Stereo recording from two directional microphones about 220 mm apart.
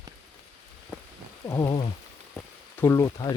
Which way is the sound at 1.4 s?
15° left (ahead or behind).